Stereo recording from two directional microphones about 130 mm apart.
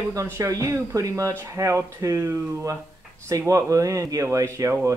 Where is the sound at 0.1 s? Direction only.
25° right (ahead or behind).